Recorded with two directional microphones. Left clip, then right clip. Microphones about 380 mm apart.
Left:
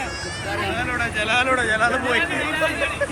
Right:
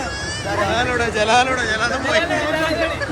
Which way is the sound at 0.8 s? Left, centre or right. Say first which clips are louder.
Right 5 dB; centre.